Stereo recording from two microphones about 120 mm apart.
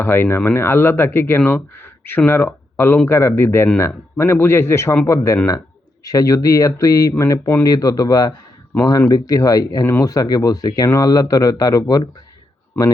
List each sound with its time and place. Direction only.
0.0 s speech: 20° left (ahead or behind)